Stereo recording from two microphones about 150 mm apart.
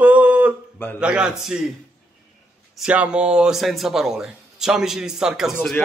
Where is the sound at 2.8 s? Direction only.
10° right (ahead or behind).